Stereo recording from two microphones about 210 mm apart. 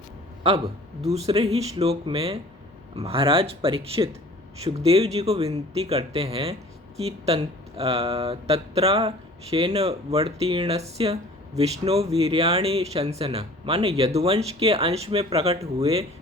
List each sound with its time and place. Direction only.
1.0 s speech: 30° right (ahead or behind)